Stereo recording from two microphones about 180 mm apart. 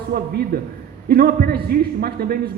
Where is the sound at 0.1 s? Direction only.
60° right (ahead or behind).